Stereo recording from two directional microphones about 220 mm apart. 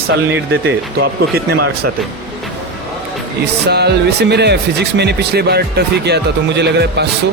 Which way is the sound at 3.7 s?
50° right (ahead or behind).